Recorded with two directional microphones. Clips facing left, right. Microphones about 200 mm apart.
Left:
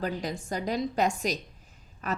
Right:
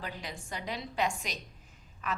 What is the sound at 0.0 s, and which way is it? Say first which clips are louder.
A woman's voice: left 10 dB; 40° left (ahead or behind).